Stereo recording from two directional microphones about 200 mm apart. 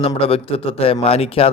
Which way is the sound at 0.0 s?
30° left (ahead or behind).